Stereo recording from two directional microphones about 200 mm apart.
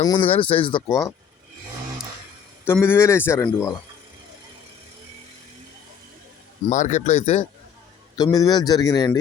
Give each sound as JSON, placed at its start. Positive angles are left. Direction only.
{"t": 0.0, "sound": "speech", "side_deg": 25}
{"t": 2.6, "sound": "speech", "side_deg": 10}
{"t": 6.7, "sound": "speech", "side_deg": 35}
{"t": 8.2, "sound": "speech", "side_deg": 20}